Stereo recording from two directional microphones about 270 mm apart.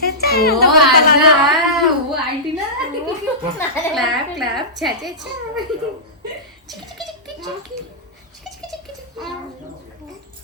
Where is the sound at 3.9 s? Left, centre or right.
Centre.